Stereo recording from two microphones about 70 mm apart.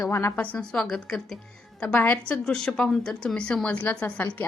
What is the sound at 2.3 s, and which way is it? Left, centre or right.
A woman's voice, centre.